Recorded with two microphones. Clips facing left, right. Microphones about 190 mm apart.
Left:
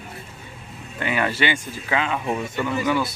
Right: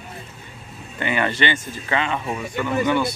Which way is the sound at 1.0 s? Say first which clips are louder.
Right 1 dB; centre (ahead or behind).